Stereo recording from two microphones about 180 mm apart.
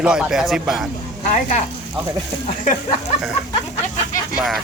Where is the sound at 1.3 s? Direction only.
45° left (ahead or behind).